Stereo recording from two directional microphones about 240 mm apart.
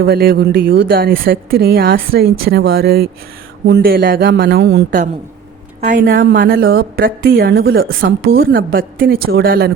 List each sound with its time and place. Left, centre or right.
0.0 s a woman's voice: right